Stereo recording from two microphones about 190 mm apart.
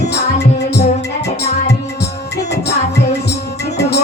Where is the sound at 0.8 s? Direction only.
60° left (ahead or behind).